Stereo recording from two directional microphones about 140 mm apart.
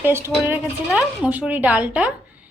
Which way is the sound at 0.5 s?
5° right (ahead or behind).